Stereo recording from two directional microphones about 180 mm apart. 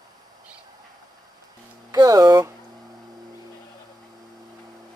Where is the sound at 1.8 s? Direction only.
20° right (ahead or behind).